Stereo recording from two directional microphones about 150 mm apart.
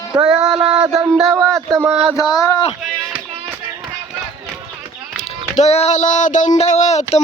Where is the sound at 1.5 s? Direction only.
20° right (ahead or behind).